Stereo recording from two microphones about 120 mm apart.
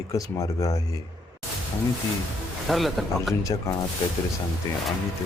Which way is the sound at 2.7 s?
Centre (ahead or behind).